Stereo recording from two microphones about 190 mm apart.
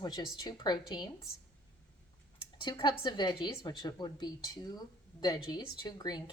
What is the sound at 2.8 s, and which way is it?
A woman's voice, 20° left (ahead or behind).